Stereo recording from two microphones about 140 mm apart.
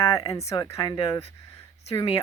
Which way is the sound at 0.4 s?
25° left (ahead or behind).